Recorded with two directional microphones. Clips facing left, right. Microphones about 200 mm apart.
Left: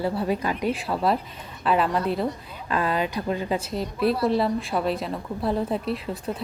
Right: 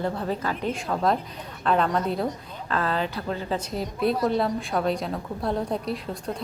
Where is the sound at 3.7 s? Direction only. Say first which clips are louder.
Even; centre (ahead or behind).